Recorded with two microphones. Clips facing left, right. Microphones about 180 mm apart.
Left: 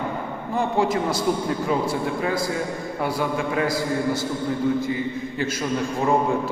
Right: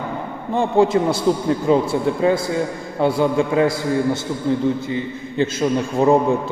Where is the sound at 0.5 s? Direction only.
25° right (ahead or behind).